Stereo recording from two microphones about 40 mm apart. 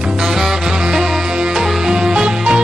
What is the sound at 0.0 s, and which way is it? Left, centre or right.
Music, centre.